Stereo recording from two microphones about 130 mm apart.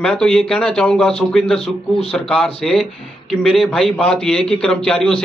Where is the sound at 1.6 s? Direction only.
50° left (ahead or behind).